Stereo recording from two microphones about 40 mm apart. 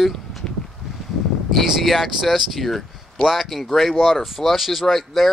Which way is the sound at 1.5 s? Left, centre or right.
Centre.